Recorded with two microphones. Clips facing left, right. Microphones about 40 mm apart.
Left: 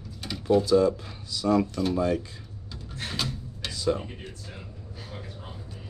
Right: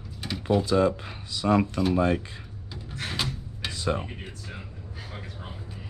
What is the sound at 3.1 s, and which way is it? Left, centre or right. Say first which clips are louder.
Rub: even; centre.